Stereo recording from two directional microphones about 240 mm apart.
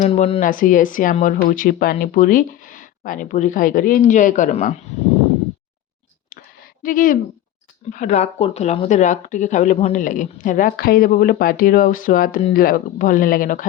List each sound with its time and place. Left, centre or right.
0.0 s speech: left
6.8 s speech: left